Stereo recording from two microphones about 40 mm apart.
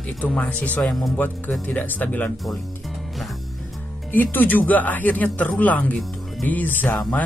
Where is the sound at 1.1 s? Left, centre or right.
Left.